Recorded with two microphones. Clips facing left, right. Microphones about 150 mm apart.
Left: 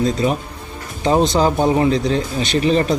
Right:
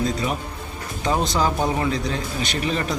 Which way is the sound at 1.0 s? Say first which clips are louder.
Left 7 dB; 25° left (ahead or behind).